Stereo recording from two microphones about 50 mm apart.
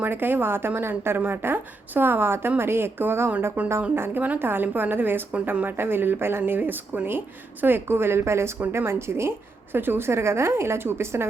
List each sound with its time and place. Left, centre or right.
0.0 s a woman's voice: right
3.6 s speech: right
3.9 s a woman's voice: right
6.4 s speech: right
7.6 s speech: right
9.7 s speech: right